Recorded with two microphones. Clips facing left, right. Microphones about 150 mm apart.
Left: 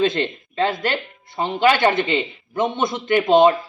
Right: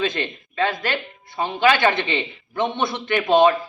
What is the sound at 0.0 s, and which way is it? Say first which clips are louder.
Speech: left 5 dB; 25° left (ahead or behind).